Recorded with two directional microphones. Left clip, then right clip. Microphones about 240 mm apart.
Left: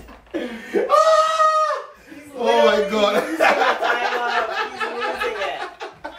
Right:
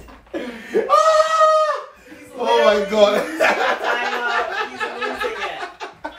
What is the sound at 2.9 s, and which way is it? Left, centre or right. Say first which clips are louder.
Speech: right 3 dB; centre.